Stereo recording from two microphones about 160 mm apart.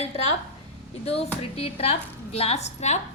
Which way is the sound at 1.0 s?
40° left (ahead or behind).